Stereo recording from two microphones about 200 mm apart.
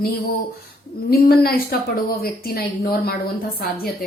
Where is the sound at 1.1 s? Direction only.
50° left (ahead or behind).